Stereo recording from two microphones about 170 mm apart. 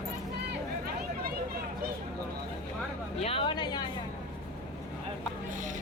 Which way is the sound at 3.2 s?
30° left (ahead or behind).